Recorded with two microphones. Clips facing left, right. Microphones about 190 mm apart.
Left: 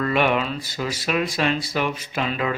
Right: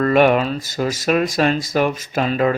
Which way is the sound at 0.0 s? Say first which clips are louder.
Right 7 dB; 45° right (ahead or behind).